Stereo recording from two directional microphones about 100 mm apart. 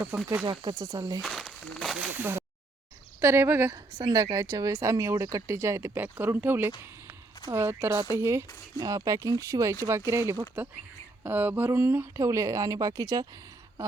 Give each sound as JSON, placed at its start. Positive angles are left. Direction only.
{"t": 0.1, "sound": "speech", "side_deg": -35}
{"t": 1.2, "sound": "a sound", "side_deg": 0}
{"t": 2.1, "sound": "speech", "side_deg": -20}
{"t": 4.0, "sound": "speech", "side_deg": -40}